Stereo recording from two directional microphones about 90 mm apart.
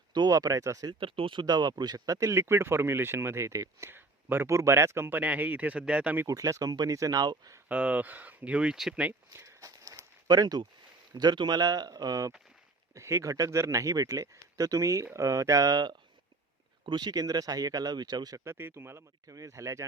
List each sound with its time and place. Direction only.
0.1 s speech: 55° right (ahead or behind)
0.3 s speech: 40° right (ahead or behind)
0.9 s speech: 75° right (ahead or behind); by 6.2 s 15° right (ahead or behind)
6.2 s speech: 40° right (ahead or behind)
7.7 s speech: 15° right (ahead or behind)
9.3 s walk: 30° right (ahead or behind)
10.2 s speech: 50° right (ahead or behind)
12.9 s speech: 30° right (ahead or behind)
18.4 s speech: 25° right (ahead or behind)